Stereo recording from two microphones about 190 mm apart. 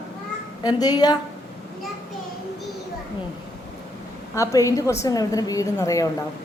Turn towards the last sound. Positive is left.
turn(degrees=20)  # may be behind; listen again after turning